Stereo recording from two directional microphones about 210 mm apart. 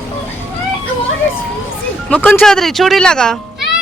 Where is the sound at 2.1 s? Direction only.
10° left (ahead or behind).